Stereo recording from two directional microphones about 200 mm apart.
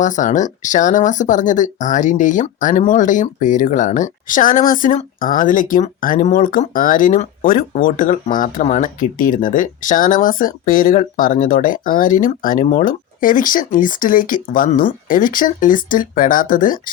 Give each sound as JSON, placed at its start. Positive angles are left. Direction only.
{"t": 0.0, "sound": "speech", "side_deg": 40}